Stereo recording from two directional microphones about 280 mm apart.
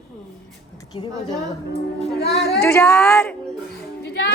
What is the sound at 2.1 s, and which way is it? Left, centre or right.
Speech, left.